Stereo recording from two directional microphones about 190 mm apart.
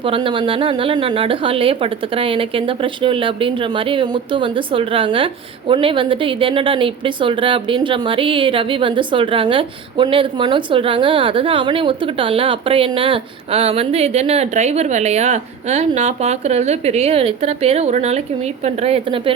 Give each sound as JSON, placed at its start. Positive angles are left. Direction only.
{"t": 0.0, "sound": "a woman's voice", "side_deg": -25}